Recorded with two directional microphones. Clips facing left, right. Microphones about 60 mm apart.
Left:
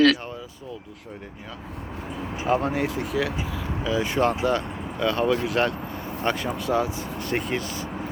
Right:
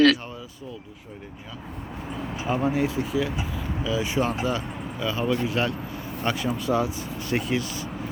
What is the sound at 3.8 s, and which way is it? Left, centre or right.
Speech, left.